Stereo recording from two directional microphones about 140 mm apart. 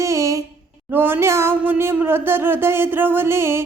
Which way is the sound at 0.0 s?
20° right (ahead or behind).